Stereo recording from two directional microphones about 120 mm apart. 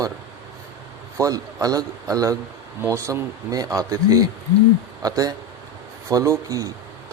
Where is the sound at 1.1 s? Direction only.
25° right (ahead or behind).